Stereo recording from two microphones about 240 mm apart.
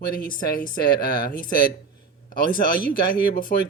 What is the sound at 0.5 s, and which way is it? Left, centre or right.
Speech, left.